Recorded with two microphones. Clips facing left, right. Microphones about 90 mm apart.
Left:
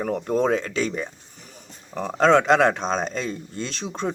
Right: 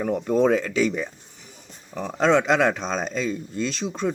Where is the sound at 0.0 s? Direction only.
50° left (ahead or behind).